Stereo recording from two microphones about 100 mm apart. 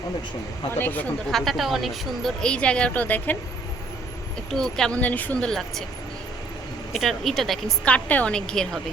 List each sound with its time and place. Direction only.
0.8 s speech: 20° left (ahead or behind)
1.3 s a woman's voice: centre (ahead or behind)
4.5 s a woman's voice: 5° left (ahead or behind)
4.9 s a woman's voice: 15° left (ahead or behind)
6.9 s a woman's voice: centre (ahead or behind)
7.9 s a woman's voice: 15° left (ahead or behind)